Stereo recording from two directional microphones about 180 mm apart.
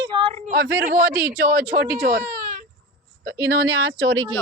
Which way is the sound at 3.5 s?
60° right (ahead or behind).